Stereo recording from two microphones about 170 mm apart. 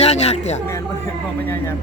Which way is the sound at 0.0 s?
40° left (ahead or behind).